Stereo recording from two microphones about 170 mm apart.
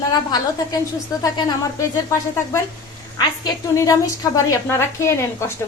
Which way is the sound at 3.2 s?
20° left (ahead or behind).